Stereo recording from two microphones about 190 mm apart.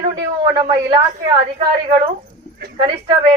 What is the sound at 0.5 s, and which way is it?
Speech, 25° right (ahead or behind).